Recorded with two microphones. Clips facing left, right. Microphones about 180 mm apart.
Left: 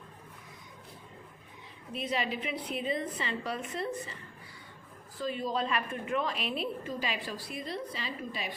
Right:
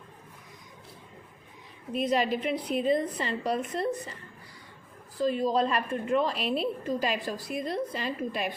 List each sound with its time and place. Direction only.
1.9 s a woman's voice: 45° right (ahead or behind)
5.2 s a woman's voice: 40° right (ahead or behind)